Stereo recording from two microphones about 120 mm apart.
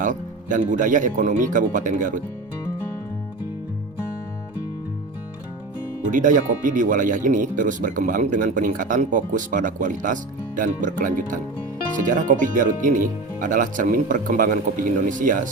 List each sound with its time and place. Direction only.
0.0 s speech: 90° right
6.1 s speech: 90° right